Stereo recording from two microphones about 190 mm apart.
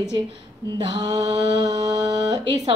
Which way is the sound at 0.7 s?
25° right (ahead or behind).